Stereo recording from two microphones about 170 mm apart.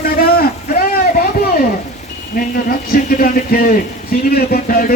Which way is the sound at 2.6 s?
55° left (ahead or behind).